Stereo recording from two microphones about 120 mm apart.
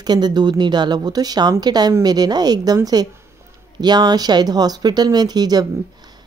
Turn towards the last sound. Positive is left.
turn(degrees=-35)  # may be behind; listen again after turning